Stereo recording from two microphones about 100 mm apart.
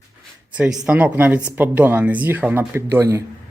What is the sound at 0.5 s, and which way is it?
A woman's voice, 10° right (ahead or behind).